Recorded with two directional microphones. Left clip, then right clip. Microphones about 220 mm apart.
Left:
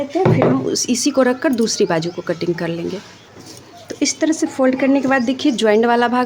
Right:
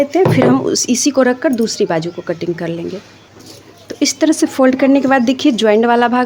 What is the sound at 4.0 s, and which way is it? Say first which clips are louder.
A woman's voice: right 4 dB; 15° right (ahead or behind).